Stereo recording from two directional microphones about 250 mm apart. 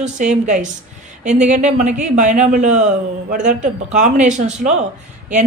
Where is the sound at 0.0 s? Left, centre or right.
Right.